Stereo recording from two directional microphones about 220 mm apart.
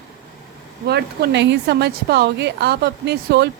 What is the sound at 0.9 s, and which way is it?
A woman's voice, 50° right (ahead or behind).